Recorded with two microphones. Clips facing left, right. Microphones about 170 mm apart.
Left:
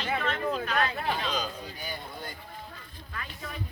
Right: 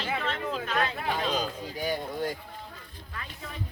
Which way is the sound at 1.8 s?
90° right.